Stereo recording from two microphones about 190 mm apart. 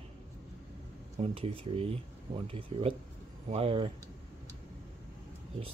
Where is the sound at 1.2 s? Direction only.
30° right (ahead or behind).